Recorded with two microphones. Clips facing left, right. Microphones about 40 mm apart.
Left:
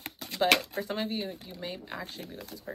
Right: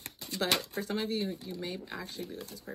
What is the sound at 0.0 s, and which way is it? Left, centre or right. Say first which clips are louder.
Shuffling cards: left 2 dB; left.